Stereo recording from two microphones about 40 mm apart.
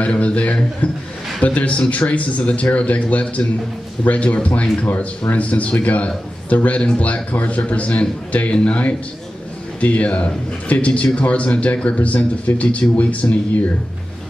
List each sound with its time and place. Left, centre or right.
0.0 s speech: left
9.8 s speech: left